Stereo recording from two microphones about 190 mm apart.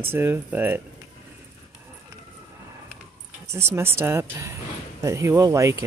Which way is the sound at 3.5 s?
15° right (ahead or behind).